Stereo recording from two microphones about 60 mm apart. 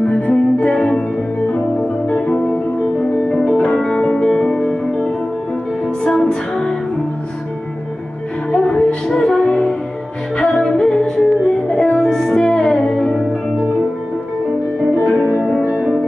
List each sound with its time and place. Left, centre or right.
0.0 s music: left
6.0 s music: centre
8.5 s music: centre